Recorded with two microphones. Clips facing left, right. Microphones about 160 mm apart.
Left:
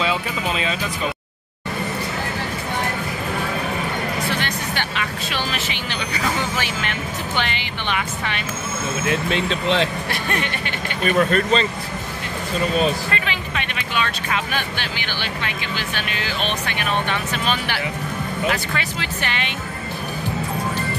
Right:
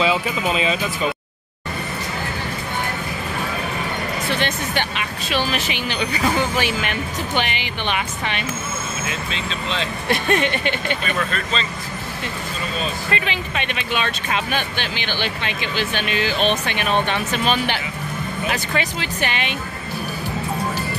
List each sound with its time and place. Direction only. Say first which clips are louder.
0.0 s speech: right 3 dB; 5° right (ahead or behind)
4.4 s music: right 3 dB; 20° right (ahead or behind)
6.6 s speech: right 3 dB; 15° right (ahead or behind)
9.3 s speech: left 6 dB; 60° left (ahead or behind)
10.0 s speech: right 5 dB; 20° right (ahead or behind)
11.1 s speech: left 7 dB; 45° left (ahead or behind)
13.1 s speech: right 2 dB; 20° right (ahead or behind)